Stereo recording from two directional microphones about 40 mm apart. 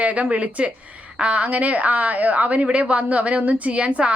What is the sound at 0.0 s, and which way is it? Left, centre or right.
A woman's voice, right.